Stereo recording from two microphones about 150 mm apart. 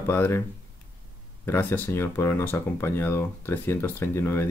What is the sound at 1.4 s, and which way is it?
Speech, 15° left (ahead or behind).